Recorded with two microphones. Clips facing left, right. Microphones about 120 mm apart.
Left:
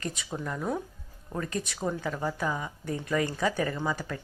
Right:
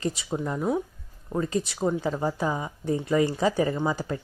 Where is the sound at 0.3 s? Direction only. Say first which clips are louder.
Right 4 dB; 20° right (ahead or behind).